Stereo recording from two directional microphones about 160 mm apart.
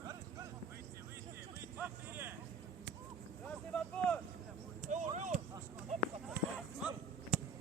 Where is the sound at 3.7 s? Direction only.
10° left (ahead or behind).